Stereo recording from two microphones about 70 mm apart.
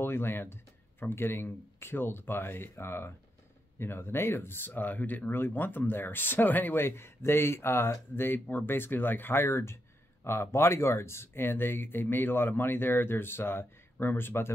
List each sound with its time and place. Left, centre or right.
0.0 s speech: left